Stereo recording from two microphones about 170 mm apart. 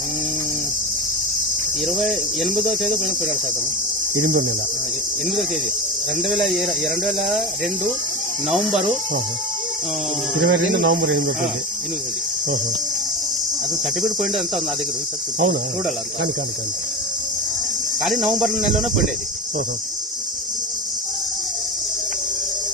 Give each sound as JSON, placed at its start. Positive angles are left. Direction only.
{"t": 1.8, "sound": "speech", "side_deg": 0}
{"t": 4.2, "sound": "cricket", "side_deg": -55}
{"t": 7.0, "sound": "speech", "side_deg": 0}
{"t": 8.4, "sound": "speech", "side_deg": 0}
{"t": 10.4, "sound": "speech", "side_deg": -85}
{"t": 14.0, "sound": "speech", "side_deg": 0}
{"t": 18.0, "sound": "speech", "side_deg": 0}